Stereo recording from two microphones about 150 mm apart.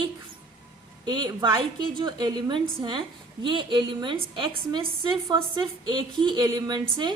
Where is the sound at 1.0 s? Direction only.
30° right (ahead or behind).